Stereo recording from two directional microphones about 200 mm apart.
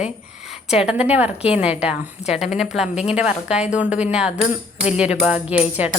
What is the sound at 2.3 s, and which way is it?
Speech, 5° right (ahead or behind).